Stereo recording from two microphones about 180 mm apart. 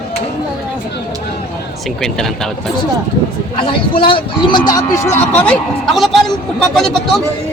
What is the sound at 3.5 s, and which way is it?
Speech, 30° left (ahead or behind).